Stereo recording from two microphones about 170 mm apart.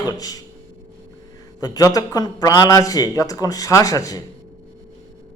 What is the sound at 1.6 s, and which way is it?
A man's voice, 20° left (ahead or behind).